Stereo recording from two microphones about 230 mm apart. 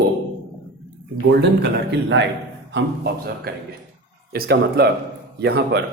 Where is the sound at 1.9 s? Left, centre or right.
Right.